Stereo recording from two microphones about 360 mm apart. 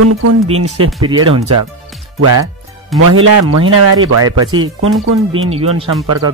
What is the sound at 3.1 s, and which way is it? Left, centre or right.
Speech, right.